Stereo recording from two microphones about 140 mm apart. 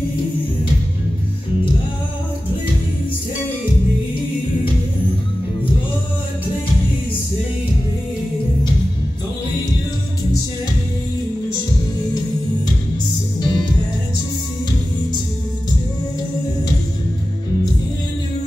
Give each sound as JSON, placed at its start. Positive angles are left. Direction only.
{"t": 13.4, "sound": "music", "side_deg": 30}